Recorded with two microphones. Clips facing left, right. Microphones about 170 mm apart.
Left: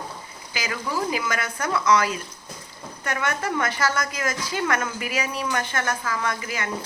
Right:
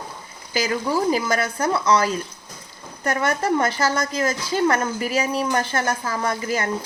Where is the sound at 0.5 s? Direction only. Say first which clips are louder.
Right 7 dB; 35° right (ahead or behind).